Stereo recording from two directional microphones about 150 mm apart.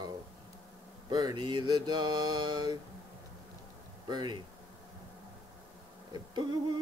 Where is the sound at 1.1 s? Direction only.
30° right (ahead or behind).